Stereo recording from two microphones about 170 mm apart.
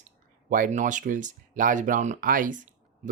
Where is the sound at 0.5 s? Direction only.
50° right (ahead or behind).